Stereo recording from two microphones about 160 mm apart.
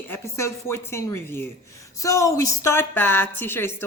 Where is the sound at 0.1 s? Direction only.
15° left (ahead or behind).